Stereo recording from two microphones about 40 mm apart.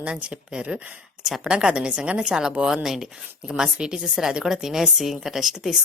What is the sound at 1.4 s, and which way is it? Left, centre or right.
Speech, right.